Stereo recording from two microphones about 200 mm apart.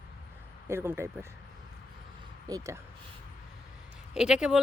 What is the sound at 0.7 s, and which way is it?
Speech, 10° right (ahead or behind).